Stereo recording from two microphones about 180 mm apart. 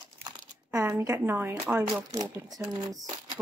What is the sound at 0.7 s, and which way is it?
Speech, 15° right (ahead or behind).